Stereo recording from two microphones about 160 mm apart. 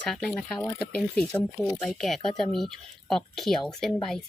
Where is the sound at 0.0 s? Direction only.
5° left (ahead or behind).